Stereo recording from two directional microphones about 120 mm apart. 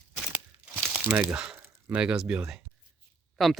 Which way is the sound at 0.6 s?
10° right (ahead or behind).